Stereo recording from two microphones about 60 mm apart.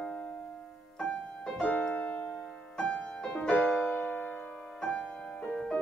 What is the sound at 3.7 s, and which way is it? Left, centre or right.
Keyboard, left.